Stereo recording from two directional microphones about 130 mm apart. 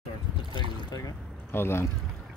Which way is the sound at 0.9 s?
30° left (ahead or behind).